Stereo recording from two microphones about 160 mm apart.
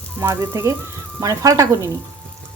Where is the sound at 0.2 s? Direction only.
15° right (ahead or behind).